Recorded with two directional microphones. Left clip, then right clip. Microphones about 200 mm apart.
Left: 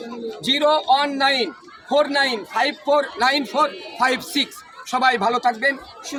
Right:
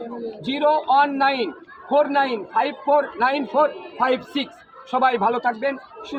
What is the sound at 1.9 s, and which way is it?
Speech, 40° left (ahead or behind).